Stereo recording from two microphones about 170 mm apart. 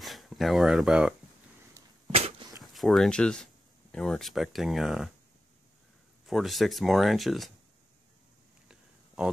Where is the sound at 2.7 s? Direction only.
Centre (ahead or behind).